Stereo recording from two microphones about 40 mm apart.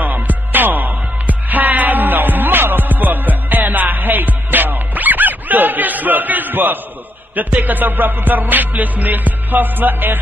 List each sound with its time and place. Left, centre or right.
0.0 s music: right